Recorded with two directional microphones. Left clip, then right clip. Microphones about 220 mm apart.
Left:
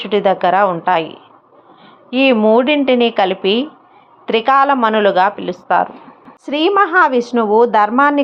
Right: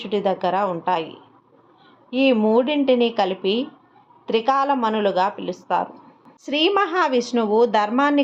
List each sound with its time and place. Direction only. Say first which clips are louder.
0.0 s a woman's voice: left 8 dB; 15° left (ahead or behind)